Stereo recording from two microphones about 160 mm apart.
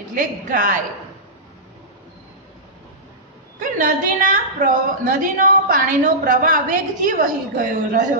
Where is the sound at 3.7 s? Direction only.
55° right (ahead or behind).